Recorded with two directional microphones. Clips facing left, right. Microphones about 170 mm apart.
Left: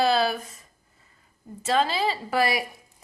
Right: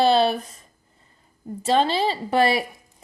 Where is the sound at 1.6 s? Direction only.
30° right (ahead or behind).